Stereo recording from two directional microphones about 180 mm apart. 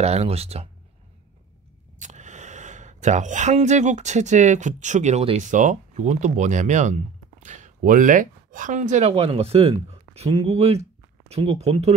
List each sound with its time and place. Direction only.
0.0 s speech: 35° right (ahead or behind)
2.0 s speech: 40° right (ahead or behind)